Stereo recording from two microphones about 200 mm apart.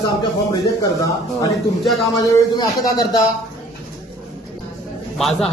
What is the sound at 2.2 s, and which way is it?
Speech, 15° left (ahead or behind).